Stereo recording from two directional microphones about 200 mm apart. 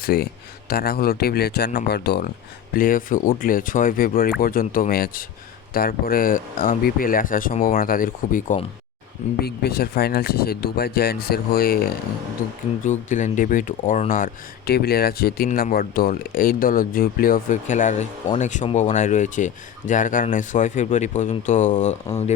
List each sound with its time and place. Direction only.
0.0 s speech: 50° left (ahead or behind)
2.7 s speech: 45° left (ahead or behind)
9.4 s speech: 50° left (ahead or behind)
12.8 s speech: 40° left (ahead or behind)
14.7 s speech: 50° left (ahead or behind)